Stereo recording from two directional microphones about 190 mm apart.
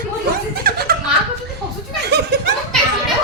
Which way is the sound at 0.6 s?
50° right (ahead or behind).